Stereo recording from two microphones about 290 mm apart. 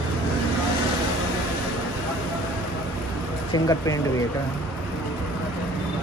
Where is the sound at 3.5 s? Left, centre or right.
Centre.